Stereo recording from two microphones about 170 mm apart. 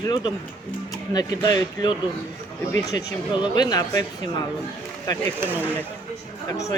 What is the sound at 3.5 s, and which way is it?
Speech, 25° left (ahead or behind).